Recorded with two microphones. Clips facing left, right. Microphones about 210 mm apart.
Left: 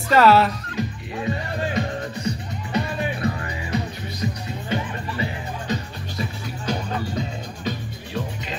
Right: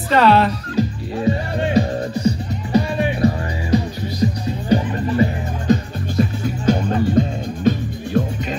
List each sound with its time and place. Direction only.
0.1 s speech: centre (ahead or behind)
0.7 s music: 35° right (ahead or behind)
4.6 s music: 40° right (ahead or behind)